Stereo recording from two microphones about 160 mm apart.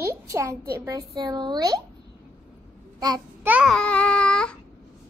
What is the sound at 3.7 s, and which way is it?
Baby cry, 5° left (ahead or behind).